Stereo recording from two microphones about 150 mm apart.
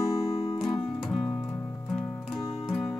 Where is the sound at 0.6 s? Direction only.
Centre (ahead or behind).